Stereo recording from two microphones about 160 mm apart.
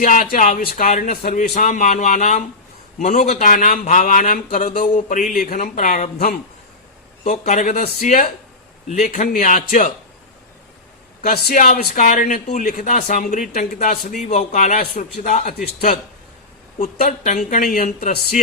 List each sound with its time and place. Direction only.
0.0 s speech: 55° left (ahead or behind)
1.1 s a man's voice: 55° left (ahead or behind)
7.3 s a man's voice: 50° left (ahead or behind)
11.2 s a man's voice: 65° left (ahead or behind)
16.7 s speech: 50° left (ahead or behind)